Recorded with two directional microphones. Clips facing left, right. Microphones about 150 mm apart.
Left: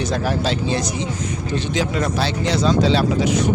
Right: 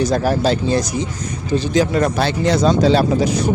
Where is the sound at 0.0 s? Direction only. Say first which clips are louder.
Right 5 dB; 40° right (ahead or behind).